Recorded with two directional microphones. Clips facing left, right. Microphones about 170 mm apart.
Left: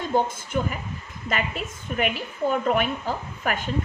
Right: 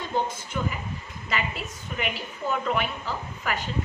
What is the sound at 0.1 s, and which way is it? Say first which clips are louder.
Speech: left 5 dB; 50° left (ahead or behind).